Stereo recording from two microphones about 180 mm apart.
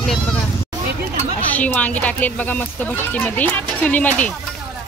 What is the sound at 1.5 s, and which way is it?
Speech, 10° left (ahead or behind).